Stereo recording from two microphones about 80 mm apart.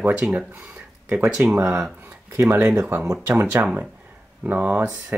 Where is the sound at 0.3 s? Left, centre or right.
Right.